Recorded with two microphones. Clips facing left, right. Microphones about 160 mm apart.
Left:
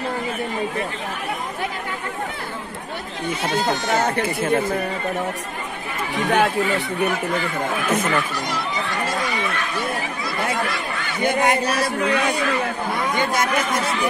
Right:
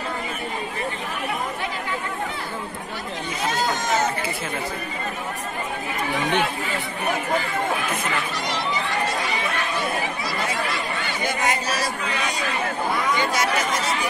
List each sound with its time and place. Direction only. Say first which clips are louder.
3.9 s speech: left 3 dB; 50° left (ahead or behind)
6.3 s speech: left 5 dB; 40° left (ahead or behind)
7.9 s speech: left 6 dB; 40° left (ahead or behind)
11.2 s a man's voice: left 7 dB; 55° left (ahead or behind)